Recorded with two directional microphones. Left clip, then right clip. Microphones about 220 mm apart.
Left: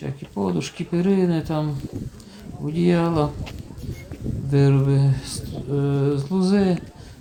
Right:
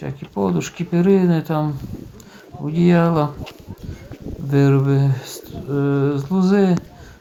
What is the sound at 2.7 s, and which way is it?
Speech, 10° right (ahead or behind).